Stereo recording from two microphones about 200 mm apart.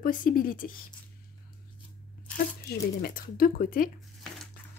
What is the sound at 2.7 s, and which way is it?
Speech, 45° left (ahead or behind).